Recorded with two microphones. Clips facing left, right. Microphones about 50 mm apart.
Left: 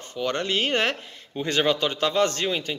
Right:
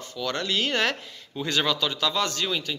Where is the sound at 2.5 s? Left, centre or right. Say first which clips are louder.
Left 2 dB; left.